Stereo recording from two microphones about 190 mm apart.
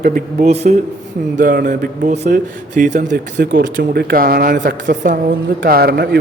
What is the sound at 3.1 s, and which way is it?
A man's voice, 65° right (ahead or behind).